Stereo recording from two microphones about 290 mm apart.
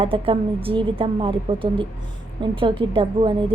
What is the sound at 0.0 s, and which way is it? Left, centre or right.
A woman's voice, centre.